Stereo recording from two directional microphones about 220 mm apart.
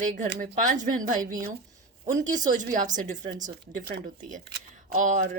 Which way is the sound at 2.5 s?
35° right (ahead or behind).